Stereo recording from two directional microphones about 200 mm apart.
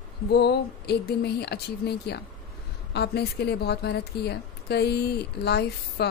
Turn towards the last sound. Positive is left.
turn(degrees=55)  # may be behind; listen again after turning